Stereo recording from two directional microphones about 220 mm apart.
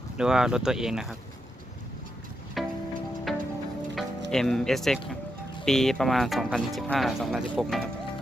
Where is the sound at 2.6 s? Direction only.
Centre (ahead or behind).